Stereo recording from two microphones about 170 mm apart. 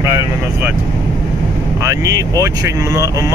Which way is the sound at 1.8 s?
20° right (ahead or behind).